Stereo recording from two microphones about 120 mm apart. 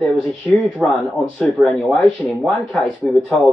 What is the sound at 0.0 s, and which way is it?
Speech, centre (ahead or behind).